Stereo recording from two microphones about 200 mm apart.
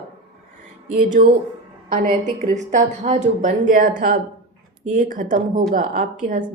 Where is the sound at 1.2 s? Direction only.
40° right (ahead or behind).